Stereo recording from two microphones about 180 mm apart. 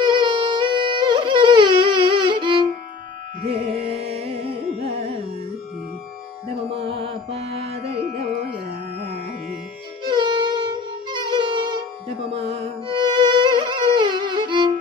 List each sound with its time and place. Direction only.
0.0 s music: 25° right (ahead or behind)
3.4 s carnatic music: 35° right (ahead or behind)
6.9 s music: 30° right (ahead or behind)
10.0 s music: 25° right (ahead or behind)